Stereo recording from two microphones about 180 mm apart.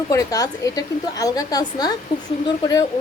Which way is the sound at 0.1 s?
20° left (ahead or behind).